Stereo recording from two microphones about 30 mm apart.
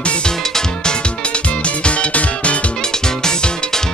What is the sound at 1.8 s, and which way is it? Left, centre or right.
Music, left.